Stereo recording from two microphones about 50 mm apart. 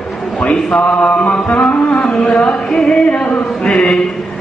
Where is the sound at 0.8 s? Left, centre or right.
Left.